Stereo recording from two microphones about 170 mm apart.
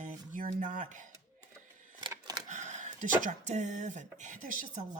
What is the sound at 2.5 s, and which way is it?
Speech, 45° right (ahead or behind).